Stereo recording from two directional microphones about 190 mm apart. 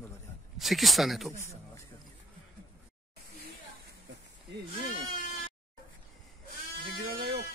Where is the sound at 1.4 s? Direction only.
15° left (ahead or behind).